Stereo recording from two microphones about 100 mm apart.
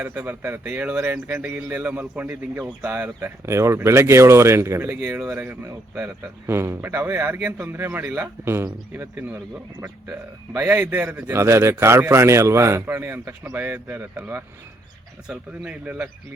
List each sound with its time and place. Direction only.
0.0 s a man's voice: 15° right (ahead or behind)
10.6 s a man's voice: 15° right (ahead or behind)